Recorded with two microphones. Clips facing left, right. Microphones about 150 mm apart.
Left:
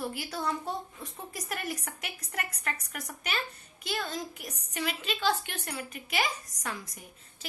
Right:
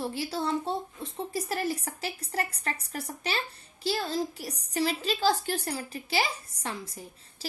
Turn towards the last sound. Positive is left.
turn(degrees=-30)  # may be behind; listen again after turning